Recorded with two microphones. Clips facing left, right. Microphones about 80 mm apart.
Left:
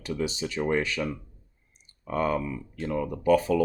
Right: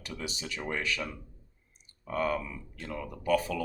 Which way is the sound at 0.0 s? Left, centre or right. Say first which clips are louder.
Left 9 dB; left.